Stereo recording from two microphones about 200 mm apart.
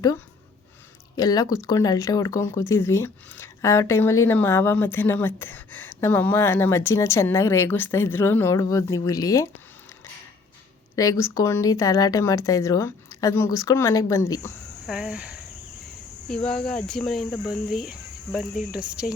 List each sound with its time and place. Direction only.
1.1 s speech: 20° left (ahead or behind)
10.9 s speech: 15° left (ahead or behind)
14.8 s cricket: centre (ahead or behind)
16.5 s speech: 5° left (ahead or behind)